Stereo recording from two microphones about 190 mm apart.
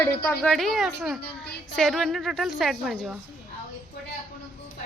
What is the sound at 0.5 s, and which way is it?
A woman's voice, centre (ahead or behind).